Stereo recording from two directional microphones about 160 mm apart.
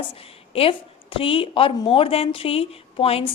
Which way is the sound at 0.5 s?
35° left (ahead or behind).